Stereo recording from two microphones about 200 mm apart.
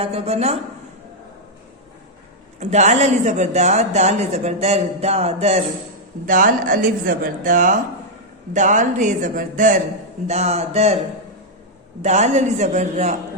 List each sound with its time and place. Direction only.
0.0 s a woman's voice: 30° right (ahead or behind)
2.6 s a woman's voice: 35° right (ahead or behind)
12.0 s a woman's voice: 35° right (ahead or behind)